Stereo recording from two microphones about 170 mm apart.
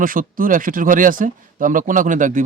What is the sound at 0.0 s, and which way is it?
Speech, 55° right (ahead or behind).